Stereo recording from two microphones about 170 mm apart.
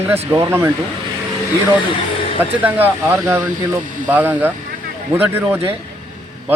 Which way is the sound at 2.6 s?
10° right (ahead or behind).